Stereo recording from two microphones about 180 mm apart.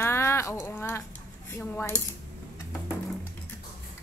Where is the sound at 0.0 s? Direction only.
15° left (ahead or behind).